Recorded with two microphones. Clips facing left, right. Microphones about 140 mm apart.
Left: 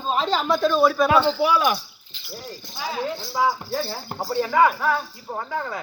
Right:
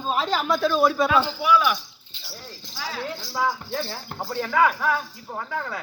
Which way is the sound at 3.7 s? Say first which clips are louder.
Left 3 dB; 5° left (ahead or behind).